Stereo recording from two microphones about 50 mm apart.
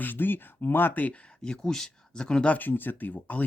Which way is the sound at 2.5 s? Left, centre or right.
Left.